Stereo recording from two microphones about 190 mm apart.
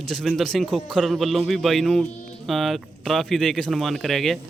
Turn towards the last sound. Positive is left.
turn(degrees=0)  # may be behind; listen again after turning